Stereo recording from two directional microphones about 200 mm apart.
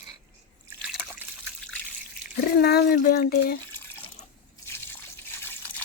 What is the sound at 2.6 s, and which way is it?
Speech, 50° left (ahead or behind).